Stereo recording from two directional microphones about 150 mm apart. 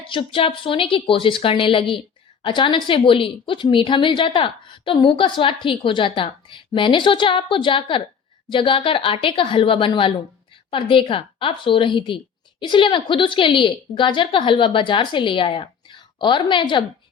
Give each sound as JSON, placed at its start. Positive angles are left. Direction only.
{"t": 0.1, "sound": "a woman's voice", "side_deg": 35}